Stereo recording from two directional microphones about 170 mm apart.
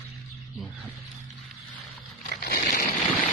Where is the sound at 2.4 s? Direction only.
60° left (ahead or behind).